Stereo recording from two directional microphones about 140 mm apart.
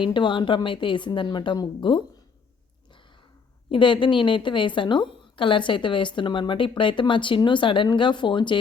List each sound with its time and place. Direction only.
0.0 s a woman's voice: 35° left (ahead or behind)
3.7 s a woman's voice: 35° left (ahead or behind)